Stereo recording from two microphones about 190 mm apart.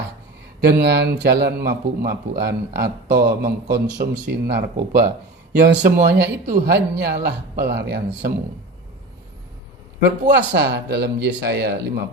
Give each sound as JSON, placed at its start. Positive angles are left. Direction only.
{"t": 0.6, "sound": "speech", "side_deg": -60}
{"t": 10.3, "sound": "speech", "side_deg": -65}